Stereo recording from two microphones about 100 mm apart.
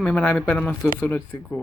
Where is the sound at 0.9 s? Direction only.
25° left (ahead or behind).